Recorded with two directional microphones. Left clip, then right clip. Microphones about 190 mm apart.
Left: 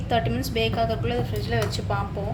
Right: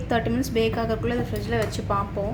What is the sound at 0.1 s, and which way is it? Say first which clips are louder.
A woman's voice: even; 35° right (ahead or behind).